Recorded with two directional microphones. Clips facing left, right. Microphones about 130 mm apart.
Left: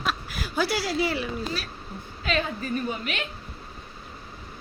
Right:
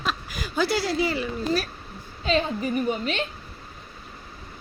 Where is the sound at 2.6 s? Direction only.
20° right (ahead or behind).